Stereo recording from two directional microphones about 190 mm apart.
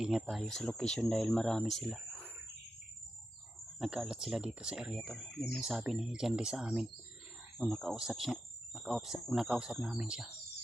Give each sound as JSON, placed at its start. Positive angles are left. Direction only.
{"t": 0.0, "sound": "speech", "side_deg": -5}
{"t": 3.8, "sound": "speech", "side_deg": -5}